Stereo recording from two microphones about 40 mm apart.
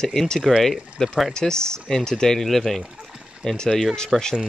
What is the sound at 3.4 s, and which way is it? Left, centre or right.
Speech, centre.